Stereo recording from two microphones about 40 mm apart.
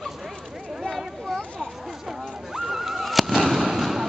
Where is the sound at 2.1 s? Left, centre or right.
Centre.